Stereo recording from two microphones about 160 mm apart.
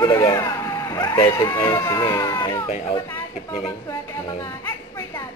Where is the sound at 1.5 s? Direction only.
20° left (ahead or behind).